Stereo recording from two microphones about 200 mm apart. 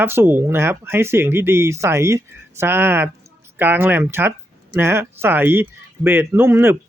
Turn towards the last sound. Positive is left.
turn(degrees=-10)  # may be behind; listen again after turning